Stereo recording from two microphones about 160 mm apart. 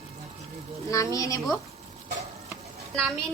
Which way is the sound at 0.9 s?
20° left (ahead or behind).